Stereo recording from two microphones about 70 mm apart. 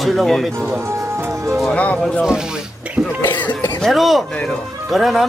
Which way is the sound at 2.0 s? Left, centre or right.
Centre.